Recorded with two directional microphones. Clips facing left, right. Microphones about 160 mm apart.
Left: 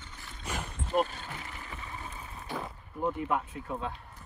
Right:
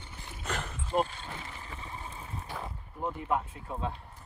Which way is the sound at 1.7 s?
30° right (ahead or behind).